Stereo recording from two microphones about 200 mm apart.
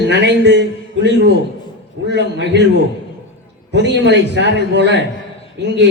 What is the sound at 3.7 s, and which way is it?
A man's voice, 60° right (ahead or behind).